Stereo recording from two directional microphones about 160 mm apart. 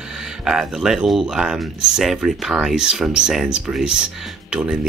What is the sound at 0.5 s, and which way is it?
Speech, 5° right (ahead or behind).